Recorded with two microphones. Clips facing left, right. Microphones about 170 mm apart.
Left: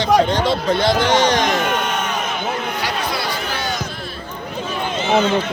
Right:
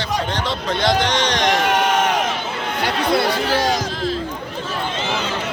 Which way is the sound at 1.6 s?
90° right.